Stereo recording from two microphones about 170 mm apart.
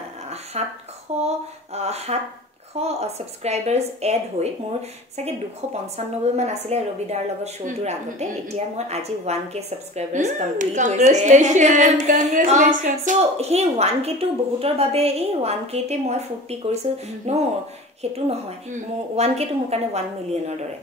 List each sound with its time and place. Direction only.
0.5 s a woman's voice: 40° right (ahead or behind)
5.9 s a woman's voice: 40° right (ahead or behind)